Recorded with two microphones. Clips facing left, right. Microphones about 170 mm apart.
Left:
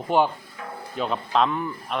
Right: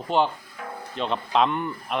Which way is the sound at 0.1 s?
10° left (ahead or behind).